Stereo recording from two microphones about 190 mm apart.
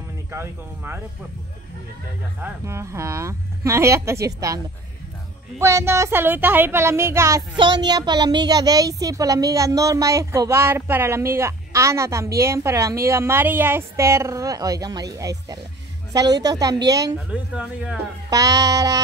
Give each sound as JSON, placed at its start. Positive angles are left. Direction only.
{"t": 0.3, "sound": "speech", "side_deg": -10}
{"t": 2.4, "sound": "speech", "side_deg": -15}
{"t": 5.6, "sound": "a woman's voice", "side_deg": -15}
{"t": 17.3, "sound": "speech", "side_deg": -5}
{"t": 18.3, "sound": "speech", "side_deg": -20}